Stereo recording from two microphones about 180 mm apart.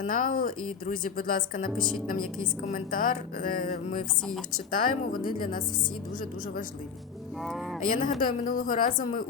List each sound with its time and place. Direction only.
0.0 s speech: 50° left (ahead or behind)
7.4 s speech: centre (ahead or behind)
7.9 s speech: 50° left (ahead or behind)